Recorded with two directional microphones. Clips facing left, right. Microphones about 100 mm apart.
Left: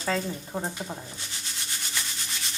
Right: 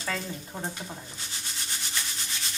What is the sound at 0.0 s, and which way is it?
Speech, 20° left (ahead or behind).